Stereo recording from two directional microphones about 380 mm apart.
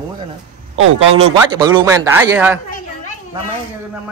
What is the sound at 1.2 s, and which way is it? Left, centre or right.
Speech, centre.